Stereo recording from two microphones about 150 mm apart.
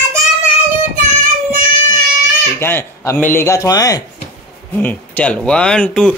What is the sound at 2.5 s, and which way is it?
Speech, 15° left (ahead or behind).